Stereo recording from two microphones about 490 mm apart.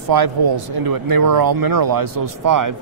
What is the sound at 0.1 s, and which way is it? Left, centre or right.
A man's voice, right.